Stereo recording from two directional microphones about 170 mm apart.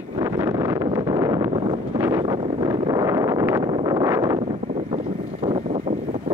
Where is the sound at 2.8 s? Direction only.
20° right (ahead or behind).